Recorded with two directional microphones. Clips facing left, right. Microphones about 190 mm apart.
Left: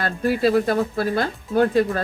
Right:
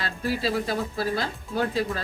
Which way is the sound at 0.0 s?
55° left (ahead or behind).